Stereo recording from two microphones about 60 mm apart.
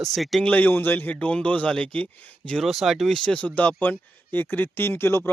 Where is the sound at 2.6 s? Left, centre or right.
Centre.